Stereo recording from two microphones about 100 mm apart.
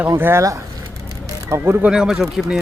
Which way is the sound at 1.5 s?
20° right (ahead or behind).